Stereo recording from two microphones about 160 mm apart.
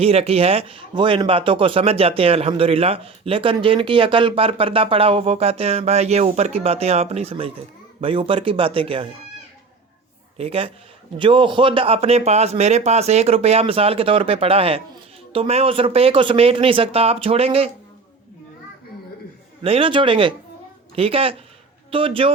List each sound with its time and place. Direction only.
0.0 s a man's voice: 40° right (ahead or behind)
10.3 s a man's voice: 35° right (ahead or behind)
19.6 s a man's voice: 35° right (ahead or behind)